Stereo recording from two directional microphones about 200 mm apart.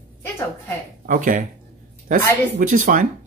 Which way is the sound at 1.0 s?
40° right (ahead or behind).